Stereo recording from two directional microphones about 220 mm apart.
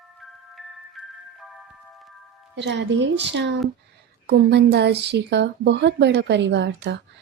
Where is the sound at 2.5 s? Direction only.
50° right (ahead or behind).